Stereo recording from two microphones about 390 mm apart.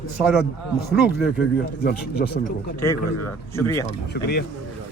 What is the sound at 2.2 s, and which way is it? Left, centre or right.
Speech, left.